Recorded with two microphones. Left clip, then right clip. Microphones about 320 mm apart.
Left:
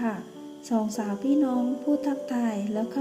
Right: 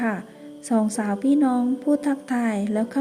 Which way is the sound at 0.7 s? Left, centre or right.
Right.